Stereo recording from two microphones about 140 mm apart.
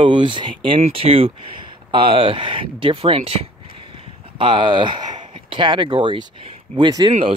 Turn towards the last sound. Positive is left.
turn(degrees=-35)  # may be behind; listen again after turning